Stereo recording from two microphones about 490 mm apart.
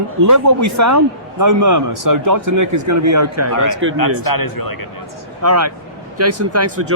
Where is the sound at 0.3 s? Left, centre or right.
Right.